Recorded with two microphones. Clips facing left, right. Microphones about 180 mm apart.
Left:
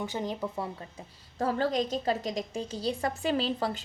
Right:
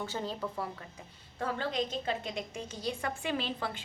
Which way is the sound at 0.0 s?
15° left (ahead or behind).